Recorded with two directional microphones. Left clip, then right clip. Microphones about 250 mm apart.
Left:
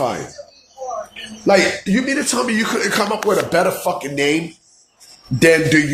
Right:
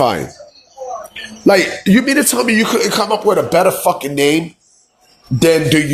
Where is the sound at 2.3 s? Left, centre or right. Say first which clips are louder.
Right 5 dB; right.